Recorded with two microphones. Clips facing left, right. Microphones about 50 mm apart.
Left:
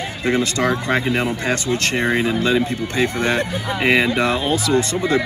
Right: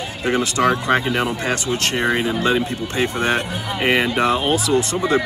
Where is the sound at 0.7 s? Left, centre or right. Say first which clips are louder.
Right 1 dB; right.